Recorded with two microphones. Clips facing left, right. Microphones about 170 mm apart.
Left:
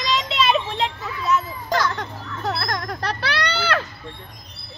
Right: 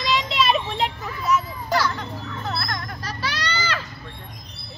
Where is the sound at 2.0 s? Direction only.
45° left (ahead or behind).